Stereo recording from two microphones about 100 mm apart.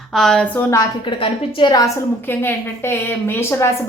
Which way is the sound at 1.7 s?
40° left (ahead or behind).